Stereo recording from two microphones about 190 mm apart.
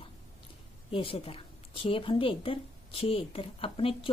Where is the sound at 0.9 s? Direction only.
30° left (ahead or behind).